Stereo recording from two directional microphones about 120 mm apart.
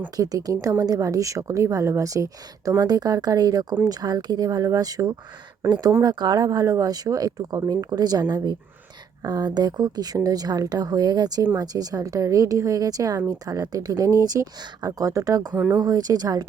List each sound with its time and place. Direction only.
0.2 s a woman's voice: 30° right (ahead or behind)